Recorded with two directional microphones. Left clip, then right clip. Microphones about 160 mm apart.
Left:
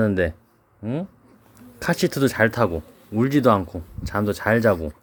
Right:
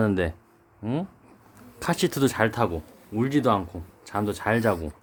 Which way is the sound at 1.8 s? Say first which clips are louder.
Left 3 dB; 15° left (ahead or behind).